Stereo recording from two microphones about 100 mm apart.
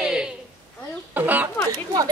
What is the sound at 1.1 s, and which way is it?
Chicken, 15° right (ahead or behind).